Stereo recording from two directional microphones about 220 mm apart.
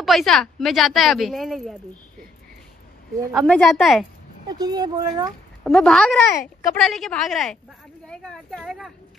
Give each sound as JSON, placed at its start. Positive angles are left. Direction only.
{"t": 0.0, "sound": "a woman's voice", "side_deg": 0}
{"t": 3.3, "sound": "a woman's voice", "side_deg": 5}
{"t": 4.5, "sound": "speech", "side_deg": -20}
{"t": 5.6, "sound": "a woman's voice", "side_deg": 5}